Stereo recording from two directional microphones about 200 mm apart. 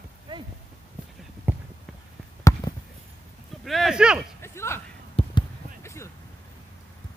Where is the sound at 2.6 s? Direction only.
20° left (ahead or behind).